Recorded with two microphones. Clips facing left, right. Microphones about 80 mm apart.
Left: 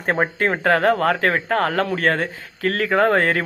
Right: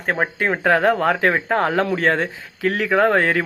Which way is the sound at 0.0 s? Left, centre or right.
Centre.